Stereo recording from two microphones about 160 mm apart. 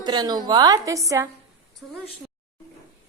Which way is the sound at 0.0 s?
25° right (ahead or behind).